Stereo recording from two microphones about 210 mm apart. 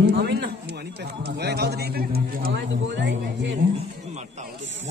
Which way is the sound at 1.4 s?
50° right (ahead or behind).